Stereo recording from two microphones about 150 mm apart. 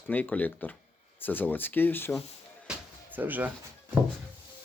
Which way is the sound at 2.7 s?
10° right (ahead or behind).